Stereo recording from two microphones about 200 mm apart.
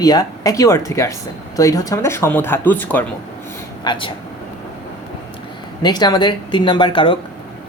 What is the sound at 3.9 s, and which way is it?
Speech, 25° left (ahead or behind).